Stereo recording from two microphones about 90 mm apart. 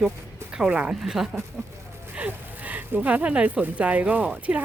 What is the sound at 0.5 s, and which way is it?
Speech, 15° right (ahead or behind).